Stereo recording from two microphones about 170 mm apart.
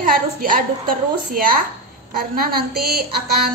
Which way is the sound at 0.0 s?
55° right (ahead or behind).